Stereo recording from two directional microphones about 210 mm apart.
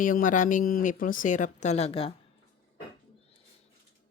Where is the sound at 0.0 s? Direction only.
40° left (ahead or behind).